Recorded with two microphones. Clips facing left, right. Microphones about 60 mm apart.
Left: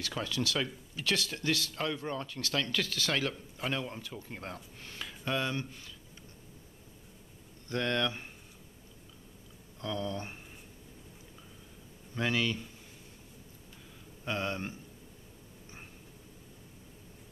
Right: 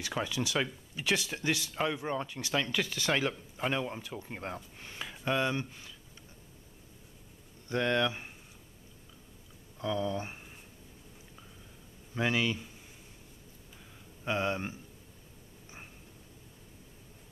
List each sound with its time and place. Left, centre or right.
0.0 s speech: centre
7.6 s speech: centre
9.8 s speech: centre
12.2 s speech: centre
14.2 s speech: centre